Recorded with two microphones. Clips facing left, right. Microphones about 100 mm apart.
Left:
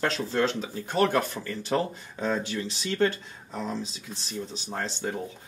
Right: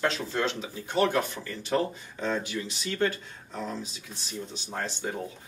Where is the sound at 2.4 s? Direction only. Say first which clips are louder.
Left 2 dB; 30° left (ahead or behind).